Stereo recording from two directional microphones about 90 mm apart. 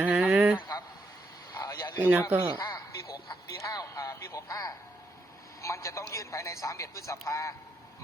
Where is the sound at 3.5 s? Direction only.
35° left (ahead or behind).